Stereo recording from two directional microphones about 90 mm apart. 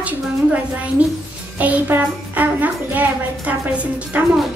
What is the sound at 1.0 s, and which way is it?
A child's voice, 15° right (ahead or behind).